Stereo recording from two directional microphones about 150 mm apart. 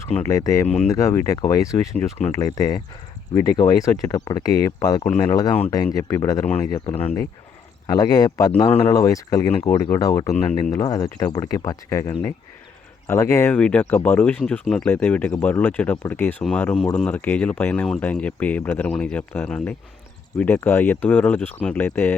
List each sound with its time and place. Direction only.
0.2 s speech: 20° left (ahead or behind)